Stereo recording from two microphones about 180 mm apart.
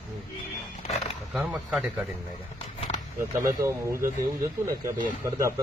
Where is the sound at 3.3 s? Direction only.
15° right (ahead or behind).